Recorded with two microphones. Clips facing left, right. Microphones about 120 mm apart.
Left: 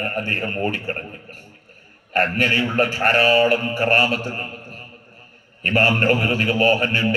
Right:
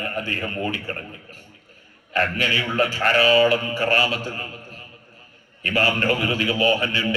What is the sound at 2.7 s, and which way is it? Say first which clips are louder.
A man's voice: even; 50° left (ahead or behind).